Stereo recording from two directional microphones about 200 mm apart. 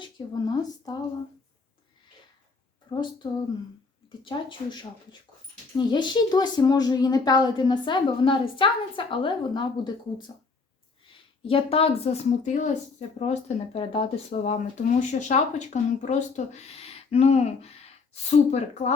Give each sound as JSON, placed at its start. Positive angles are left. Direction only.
{"t": 0.0, "sound": "speech", "side_deg": 20}
{"t": 2.9, "sound": "a woman's voice", "side_deg": 20}
{"t": 11.4, "sound": "speech", "side_deg": 30}